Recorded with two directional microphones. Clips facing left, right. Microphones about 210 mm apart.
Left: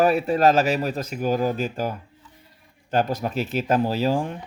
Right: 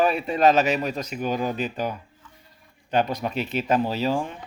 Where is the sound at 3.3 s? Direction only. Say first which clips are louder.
Left 2 dB; 45° left (ahead or behind).